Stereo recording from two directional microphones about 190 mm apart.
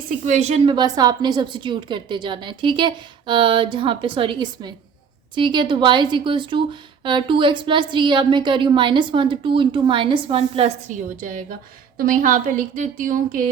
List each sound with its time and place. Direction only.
0.3 s a woman's voice: 35° right (ahead or behind)
11.9 s a woman's voice: 45° right (ahead or behind)